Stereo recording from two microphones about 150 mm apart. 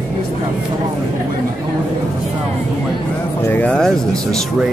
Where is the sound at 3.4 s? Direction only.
10° left (ahead or behind).